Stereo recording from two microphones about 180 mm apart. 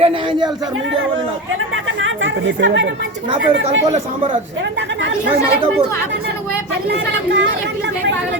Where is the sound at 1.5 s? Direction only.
90° right.